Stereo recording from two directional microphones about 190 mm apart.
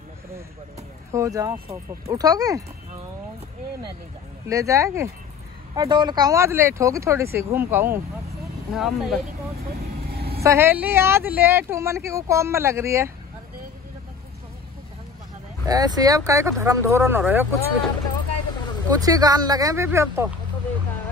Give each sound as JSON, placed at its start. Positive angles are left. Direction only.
{"t": 1.1, "sound": "speech", "side_deg": -15}
{"t": 4.5, "sound": "speech", "side_deg": -15}
{"t": 10.1, "sound": "vehicle", "side_deg": -55}
{"t": 10.4, "sound": "speech", "side_deg": -15}
{"t": 15.6, "sound": "speech", "side_deg": -20}
{"t": 18.9, "sound": "speech", "side_deg": -20}